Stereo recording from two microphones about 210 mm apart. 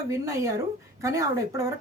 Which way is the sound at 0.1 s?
15° right (ahead or behind).